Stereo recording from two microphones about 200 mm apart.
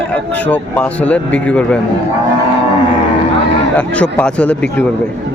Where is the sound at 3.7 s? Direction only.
5° left (ahead or behind).